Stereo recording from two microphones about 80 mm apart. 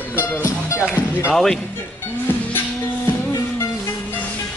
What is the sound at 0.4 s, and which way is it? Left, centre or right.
Speech, left.